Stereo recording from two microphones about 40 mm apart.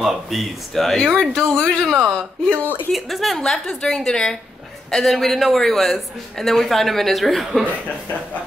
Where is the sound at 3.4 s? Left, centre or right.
Centre.